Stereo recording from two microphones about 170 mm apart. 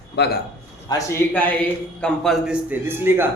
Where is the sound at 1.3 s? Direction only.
10° left (ahead or behind).